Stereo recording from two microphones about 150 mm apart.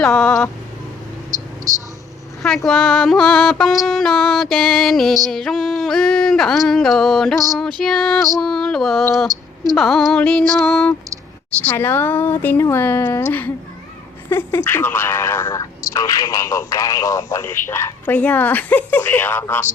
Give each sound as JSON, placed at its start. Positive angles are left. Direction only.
{"t": 0.0, "sound": "speech", "side_deg": 10}
{"t": 1.3, "sound": "a sound", "side_deg": -20}
{"t": 2.6, "sound": "music", "side_deg": 0}
{"t": 11.5, "sound": "speech", "side_deg": 10}